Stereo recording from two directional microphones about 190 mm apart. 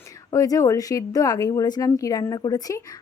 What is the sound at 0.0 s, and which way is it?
Speech, 15° left (ahead or behind).